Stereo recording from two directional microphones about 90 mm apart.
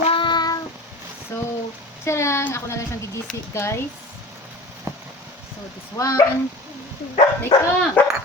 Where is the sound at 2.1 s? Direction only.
30° left (ahead or behind).